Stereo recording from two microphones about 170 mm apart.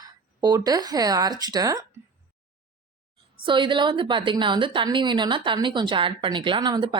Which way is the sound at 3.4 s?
30° right (ahead or behind).